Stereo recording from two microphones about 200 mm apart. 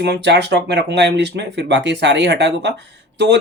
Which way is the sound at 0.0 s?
55° right (ahead or behind).